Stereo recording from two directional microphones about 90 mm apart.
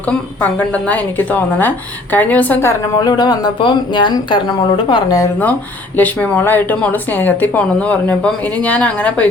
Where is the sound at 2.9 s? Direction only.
50° left (ahead or behind).